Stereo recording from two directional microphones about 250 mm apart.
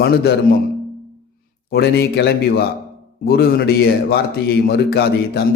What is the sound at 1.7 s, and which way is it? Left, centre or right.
Speech, left.